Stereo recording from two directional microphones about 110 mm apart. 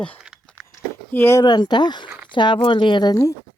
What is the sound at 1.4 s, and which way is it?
Speech, 40° left (ahead or behind).